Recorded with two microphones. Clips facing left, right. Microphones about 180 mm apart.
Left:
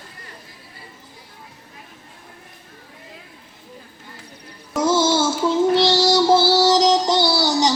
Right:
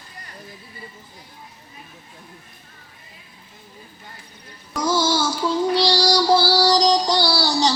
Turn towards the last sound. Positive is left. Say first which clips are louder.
# left 2 dB
turn(degrees=20)  # may be behind; listen again after turning